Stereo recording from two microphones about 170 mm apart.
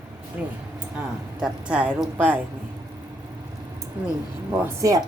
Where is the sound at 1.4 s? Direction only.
5° right (ahead or behind).